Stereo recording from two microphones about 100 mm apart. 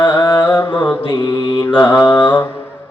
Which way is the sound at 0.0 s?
45° left (ahead or behind).